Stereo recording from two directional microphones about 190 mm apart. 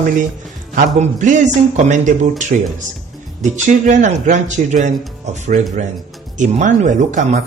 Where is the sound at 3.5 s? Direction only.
40° right (ahead or behind).